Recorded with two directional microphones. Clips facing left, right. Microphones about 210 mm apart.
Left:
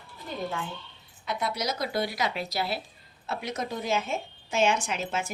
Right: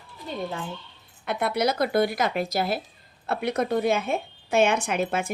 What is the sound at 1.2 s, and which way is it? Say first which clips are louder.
Speech: right 6 dB; 60° right (ahead or behind).